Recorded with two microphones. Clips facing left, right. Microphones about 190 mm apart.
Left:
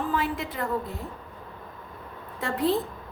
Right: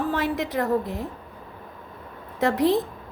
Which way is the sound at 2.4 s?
90° right.